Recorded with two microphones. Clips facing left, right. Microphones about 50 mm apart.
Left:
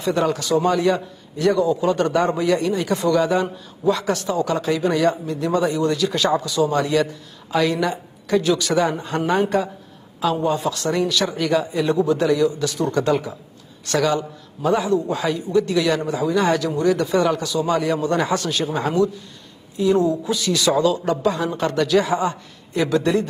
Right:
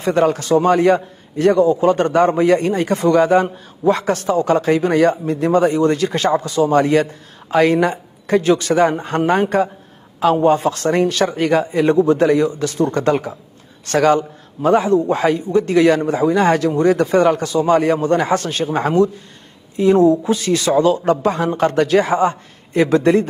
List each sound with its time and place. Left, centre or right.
0.0 s a man's voice: right